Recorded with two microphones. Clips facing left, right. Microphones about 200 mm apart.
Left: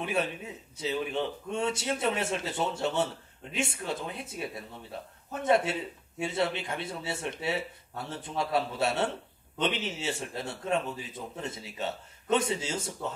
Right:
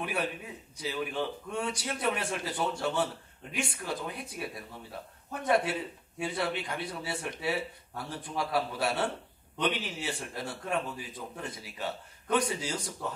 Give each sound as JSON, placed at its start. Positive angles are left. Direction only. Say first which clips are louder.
{"t": 0.0, "sound": "a man's voice", "louder": "left 3 dB", "side_deg": 25}